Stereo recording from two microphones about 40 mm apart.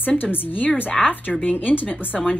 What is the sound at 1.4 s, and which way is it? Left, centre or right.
Speech, left.